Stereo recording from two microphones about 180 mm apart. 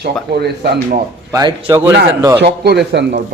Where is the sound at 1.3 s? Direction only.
25° right (ahead or behind).